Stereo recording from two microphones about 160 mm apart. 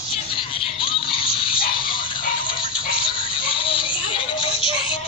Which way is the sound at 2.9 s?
35° left (ahead or behind).